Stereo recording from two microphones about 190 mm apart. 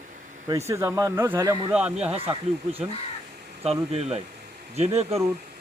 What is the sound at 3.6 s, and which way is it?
Speech, 35° right (ahead or behind).